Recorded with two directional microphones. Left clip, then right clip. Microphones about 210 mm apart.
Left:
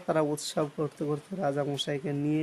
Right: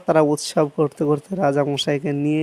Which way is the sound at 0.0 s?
35° right (ahead or behind).